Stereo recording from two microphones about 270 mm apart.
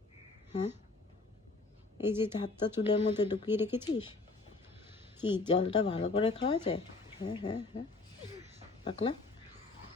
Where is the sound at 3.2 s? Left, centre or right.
Centre.